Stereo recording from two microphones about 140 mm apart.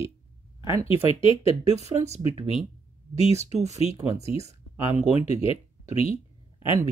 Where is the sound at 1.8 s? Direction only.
50° right (ahead or behind).